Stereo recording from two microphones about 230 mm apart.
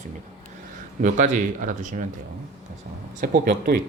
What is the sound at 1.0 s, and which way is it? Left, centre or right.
Speech, right.